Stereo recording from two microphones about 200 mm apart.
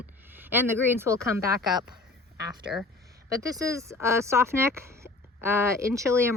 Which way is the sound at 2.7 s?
5° right (ahead or behind).